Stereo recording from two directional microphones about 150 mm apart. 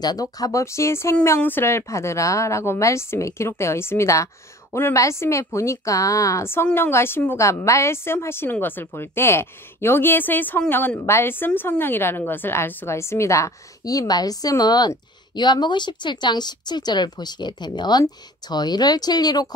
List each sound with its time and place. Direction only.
0.0 s a woman's voice: 25° left (ahead or behind)